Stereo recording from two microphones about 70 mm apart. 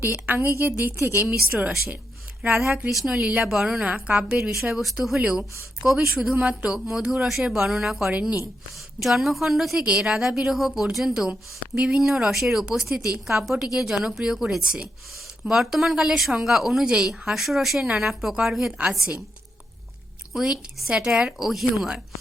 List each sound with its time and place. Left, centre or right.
0.0 s a woman's voice: right
2.6 s speech: centre
3.9 s speech: centre
4.4 s speech: centre
5.2 s speech: centre
6.7 s speech: centre
9.8 s speech: centre
20.3 s speech: centre